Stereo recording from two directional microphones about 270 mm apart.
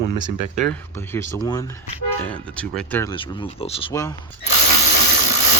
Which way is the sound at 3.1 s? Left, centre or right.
Centre.